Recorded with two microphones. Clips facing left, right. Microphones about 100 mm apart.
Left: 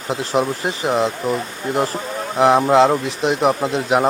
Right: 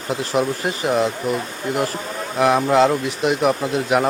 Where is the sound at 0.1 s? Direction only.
25° left (ahead or behind).